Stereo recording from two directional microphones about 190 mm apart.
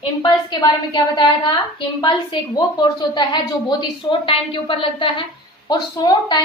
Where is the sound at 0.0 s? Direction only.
25° left (ahead or behind).